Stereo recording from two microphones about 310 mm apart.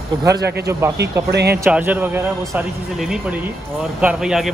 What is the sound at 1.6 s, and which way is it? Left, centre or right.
Speech, centre.